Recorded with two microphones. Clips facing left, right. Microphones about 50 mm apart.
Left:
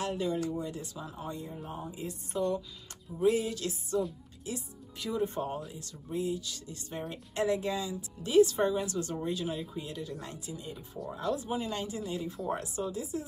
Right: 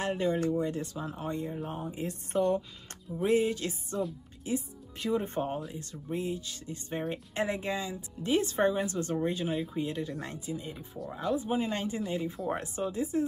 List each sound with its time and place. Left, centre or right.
0.0 s speech: right
1.6 s speech: right
1.9 s speech: right
3.3 s speech: right
4.9 s speech: right; by 11.5 s centre
11.5 s speech: right
12.9 s speech: right